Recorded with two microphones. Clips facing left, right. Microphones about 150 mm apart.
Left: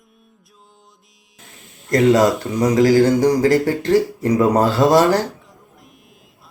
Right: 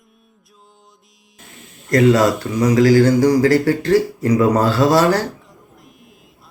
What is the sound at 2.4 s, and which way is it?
Speech, 20° left (ahead or behind).